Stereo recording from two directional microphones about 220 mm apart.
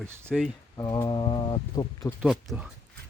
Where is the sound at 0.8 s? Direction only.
15° left (ahead or behind).